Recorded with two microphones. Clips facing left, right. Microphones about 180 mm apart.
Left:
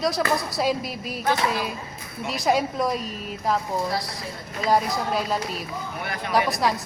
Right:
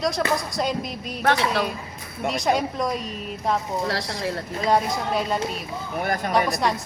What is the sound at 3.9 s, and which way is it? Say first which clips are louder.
Speech: right 3 dB; 85° right.